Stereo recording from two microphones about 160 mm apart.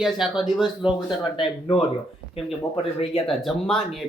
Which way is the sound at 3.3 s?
Centre (ahead or behind).